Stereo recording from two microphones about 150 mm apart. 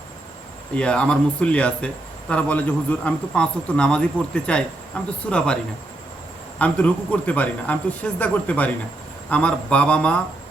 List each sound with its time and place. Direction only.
0.8 s a man's voice: 5° left (ahead or behind)
6.6 s a man's voice: 10° left (ahead or behind)